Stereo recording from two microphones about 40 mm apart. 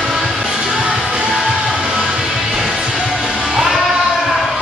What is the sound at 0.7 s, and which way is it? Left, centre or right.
Music, right.